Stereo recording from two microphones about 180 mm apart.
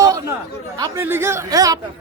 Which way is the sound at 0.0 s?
20° right (ahead or behind).